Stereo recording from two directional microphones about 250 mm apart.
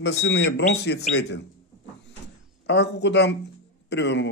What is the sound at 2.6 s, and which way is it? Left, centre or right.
Speech, left.